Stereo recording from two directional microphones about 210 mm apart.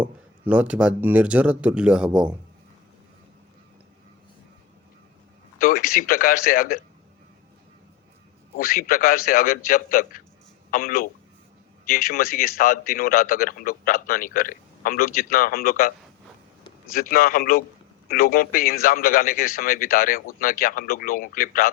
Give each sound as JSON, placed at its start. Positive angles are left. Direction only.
{"t": 0.0, "sound": "speech", "side_deg": -5}
{"t": 5.5, "sound": "speech", "side_deg": 45}
{"t": 8.5, "sound": "a man's voice", "side_deg": 40}
{"t": 16.9, "sound": "a man's voice", "side_deg": 45}